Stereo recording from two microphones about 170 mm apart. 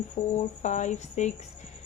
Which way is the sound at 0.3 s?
45° left (ahead or behind).